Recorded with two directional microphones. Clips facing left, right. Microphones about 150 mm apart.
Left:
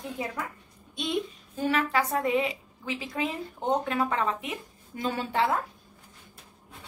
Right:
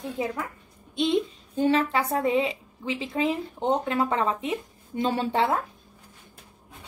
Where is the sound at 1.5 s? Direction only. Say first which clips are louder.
Right 4 dB; 25° right (ahead or behind).